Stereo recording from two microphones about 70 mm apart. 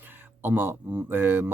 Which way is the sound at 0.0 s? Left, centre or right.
Right.